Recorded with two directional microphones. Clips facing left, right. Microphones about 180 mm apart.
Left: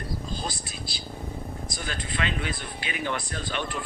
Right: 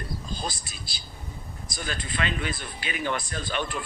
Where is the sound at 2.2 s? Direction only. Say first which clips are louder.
Even; 40° right (ahead or behind).